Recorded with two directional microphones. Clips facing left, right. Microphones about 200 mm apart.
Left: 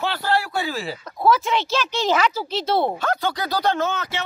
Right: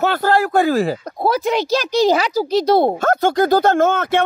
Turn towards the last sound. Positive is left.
turn(degrees=-50)  # may be behind; listen again after turning